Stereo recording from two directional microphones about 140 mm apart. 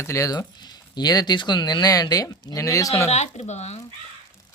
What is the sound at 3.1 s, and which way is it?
Speech, 50° left (ahead or behind).